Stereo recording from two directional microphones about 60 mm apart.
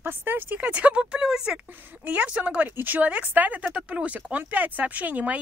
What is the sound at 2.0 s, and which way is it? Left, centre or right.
Speech, right.